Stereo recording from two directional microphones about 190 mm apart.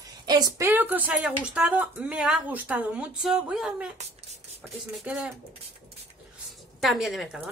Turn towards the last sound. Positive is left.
turn(degrees=0)  # may be behind; listen again after turning